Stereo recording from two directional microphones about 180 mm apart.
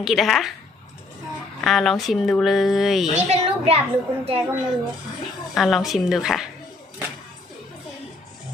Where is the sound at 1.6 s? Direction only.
Centre (ahead or behind).